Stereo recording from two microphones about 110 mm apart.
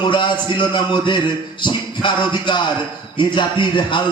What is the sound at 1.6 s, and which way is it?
Music, 45° left (ahead or behind).